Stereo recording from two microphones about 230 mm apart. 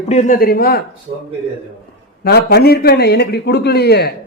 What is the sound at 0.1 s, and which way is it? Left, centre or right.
Speech, left.